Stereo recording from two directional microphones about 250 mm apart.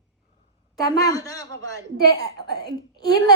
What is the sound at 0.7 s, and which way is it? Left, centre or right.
Speech, centre.